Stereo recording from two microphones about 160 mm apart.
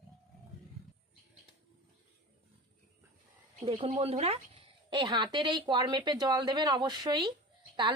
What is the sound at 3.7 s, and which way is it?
A woman's voice, 40° right (ahead or behind).